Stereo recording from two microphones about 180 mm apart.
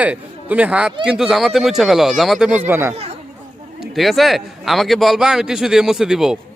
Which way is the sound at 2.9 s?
35° right (ahead or behind).